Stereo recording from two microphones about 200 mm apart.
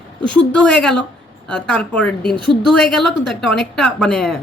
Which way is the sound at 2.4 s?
25° right (ahead or behind).